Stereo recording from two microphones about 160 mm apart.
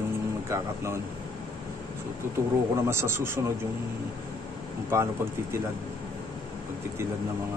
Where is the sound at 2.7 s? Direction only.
15° right (ahead or behind).